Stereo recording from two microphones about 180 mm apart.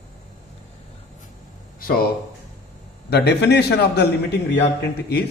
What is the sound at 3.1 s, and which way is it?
Speech, 65° left (ahead or behind).